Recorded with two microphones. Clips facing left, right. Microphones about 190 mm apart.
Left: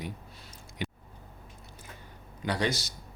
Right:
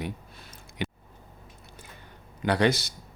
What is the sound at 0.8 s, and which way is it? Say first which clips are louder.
Squish: right 3 dB; 70° right (ahead or behind).